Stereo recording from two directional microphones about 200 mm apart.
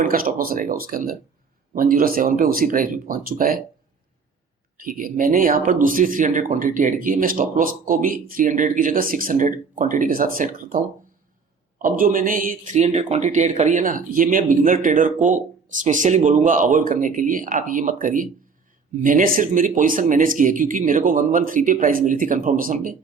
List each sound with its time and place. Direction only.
0.0 s speech: 45° right (ahead or behind)
4.8 s speech: 45° right (ahead or behind)
11.9 s speech: 45° right (ahead or behind)